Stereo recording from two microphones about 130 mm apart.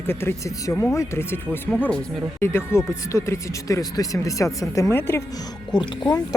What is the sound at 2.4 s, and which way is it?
Speech, 20° left (ahead or behind).